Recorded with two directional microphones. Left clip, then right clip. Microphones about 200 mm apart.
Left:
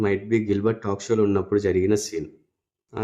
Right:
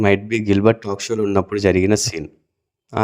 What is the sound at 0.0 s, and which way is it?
A man's voice, 45° right (ahead or behind).